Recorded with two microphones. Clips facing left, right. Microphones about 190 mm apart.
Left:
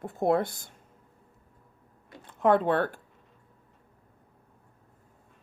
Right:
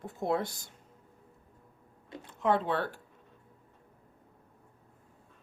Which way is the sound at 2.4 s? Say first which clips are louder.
Left 6 dB; 55° left (ahead or behind).